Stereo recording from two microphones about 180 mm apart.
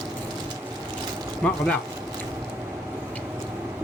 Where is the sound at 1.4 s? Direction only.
5° left (ahead or behind).